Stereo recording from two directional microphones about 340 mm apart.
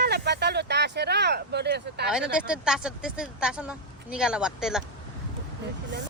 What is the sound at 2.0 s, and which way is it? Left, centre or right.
Speech, centre.